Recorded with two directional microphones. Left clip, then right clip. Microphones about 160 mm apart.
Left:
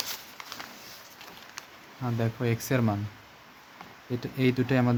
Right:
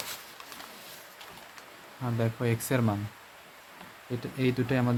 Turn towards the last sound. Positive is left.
turn(degrees=15)  # may be behind; listen again after turning